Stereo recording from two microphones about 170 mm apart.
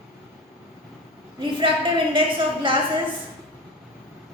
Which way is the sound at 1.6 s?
30° right (ahead or behind).